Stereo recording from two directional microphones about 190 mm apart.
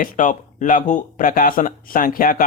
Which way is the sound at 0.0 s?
45° left (ahead or behind).